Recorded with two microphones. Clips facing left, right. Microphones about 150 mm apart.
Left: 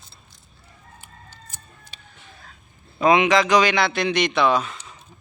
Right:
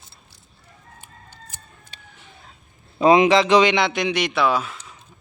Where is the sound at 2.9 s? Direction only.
30° right (ahead or behind).